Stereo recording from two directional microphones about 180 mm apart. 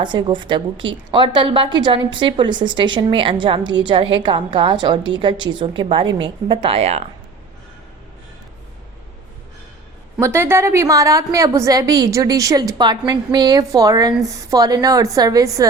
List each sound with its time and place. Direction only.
0.0 s a woman's voice: 25° right (ahead or behind)
10.2 s a woman's voice: 15° right (ahead or behind)